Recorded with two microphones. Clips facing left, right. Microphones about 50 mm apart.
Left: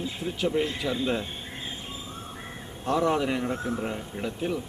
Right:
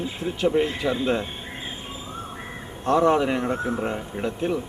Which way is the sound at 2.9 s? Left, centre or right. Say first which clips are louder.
Right 5 dB; centre.